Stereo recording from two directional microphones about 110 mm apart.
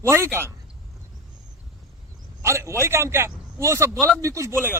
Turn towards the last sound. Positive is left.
turn(degrees=-20)  # may be behind; listen again after turning